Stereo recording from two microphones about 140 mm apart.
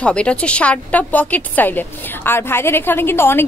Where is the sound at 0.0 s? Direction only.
10° left (ahead or behind).